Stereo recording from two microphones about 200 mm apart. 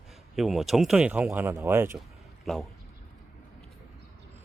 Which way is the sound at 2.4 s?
Centre (ahead or behind).